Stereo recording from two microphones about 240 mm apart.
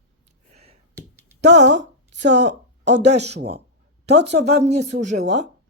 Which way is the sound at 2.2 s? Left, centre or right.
Right.